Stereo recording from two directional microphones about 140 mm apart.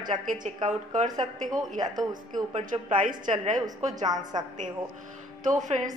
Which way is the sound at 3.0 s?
65° right (ahead or behind).